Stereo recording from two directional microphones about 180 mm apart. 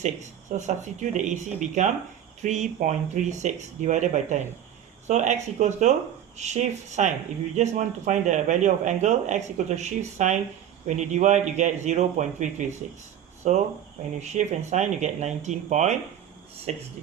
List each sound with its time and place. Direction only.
0.0 s speech: 40° right (ahead or behind)